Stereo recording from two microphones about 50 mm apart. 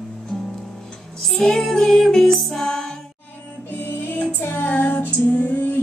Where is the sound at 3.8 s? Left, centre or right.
Left.